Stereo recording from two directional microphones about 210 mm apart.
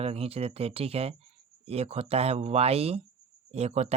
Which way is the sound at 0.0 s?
30° right (ahead or behind).